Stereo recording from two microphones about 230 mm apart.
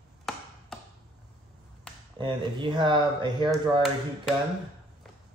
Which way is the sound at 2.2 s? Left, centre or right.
Right.